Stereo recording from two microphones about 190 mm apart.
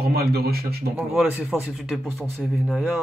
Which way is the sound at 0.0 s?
55° right (ahead or behind).